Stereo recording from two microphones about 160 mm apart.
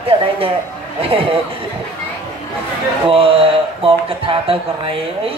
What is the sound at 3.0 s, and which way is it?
Speech, 35° right (ahead or behind).